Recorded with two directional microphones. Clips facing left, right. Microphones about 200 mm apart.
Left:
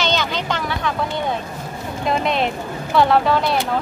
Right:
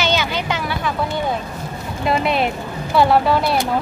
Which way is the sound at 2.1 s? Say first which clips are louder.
Right 2 dB; 5° right (ahead or behind).